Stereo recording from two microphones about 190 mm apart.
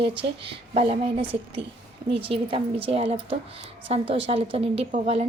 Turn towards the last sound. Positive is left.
turn(degrees=-35)  # may be behind; listen again after turning